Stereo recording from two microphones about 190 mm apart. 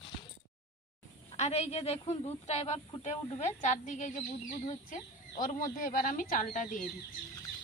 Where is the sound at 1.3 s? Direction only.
35° left (ahead or behind).